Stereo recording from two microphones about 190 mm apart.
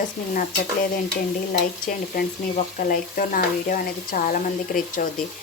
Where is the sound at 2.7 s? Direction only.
45° left (ahead or behind).